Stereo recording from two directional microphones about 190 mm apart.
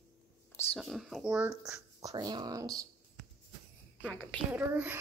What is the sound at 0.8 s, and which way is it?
Speech, centre (ahead or behind).